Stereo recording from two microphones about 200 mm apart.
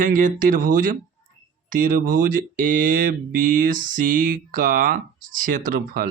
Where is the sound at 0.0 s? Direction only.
40° right (ahead or behind).